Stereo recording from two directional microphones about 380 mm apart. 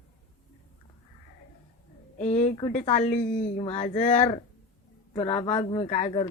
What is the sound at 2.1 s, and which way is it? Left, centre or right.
Speech, centre.